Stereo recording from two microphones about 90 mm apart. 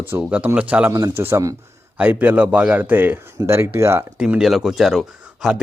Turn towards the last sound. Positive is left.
turn(degrees=-5)  # may be behind; listen again after turning